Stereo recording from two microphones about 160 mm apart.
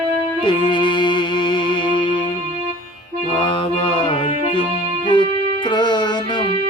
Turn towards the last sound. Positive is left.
turn(degrees=30)  # may be behind; listen again after turning